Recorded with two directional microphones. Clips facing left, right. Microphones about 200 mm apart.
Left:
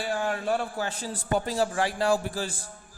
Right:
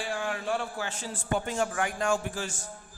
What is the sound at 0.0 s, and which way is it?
A man's voice, 40° left (ahead or behind).